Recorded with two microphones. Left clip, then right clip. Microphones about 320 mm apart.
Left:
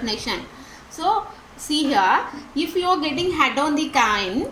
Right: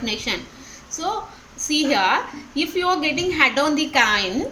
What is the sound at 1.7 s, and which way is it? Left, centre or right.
A woman's voice, centre.